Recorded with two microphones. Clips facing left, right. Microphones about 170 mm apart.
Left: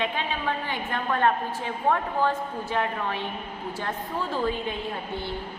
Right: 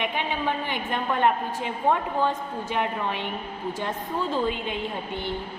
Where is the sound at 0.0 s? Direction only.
15° right (ahead or behind).